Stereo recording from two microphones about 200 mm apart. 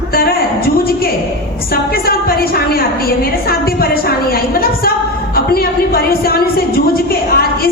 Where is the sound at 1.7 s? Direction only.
50° left (ahead or behind).